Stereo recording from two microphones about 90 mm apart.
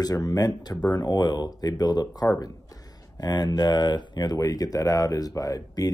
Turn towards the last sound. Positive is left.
turn(degrees=40)  # may be behind; listen again after turning